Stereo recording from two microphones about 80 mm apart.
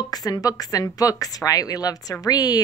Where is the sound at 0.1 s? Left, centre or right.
Left.